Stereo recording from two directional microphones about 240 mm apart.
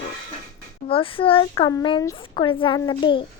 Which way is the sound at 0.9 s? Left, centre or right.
Left.